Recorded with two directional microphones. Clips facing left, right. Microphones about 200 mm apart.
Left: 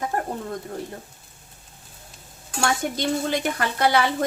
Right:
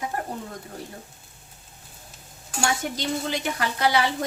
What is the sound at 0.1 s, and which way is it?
Bird, 45° left (ahead or behind).